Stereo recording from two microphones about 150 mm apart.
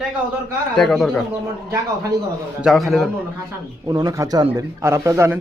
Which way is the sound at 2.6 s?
Centre (ahead or behind).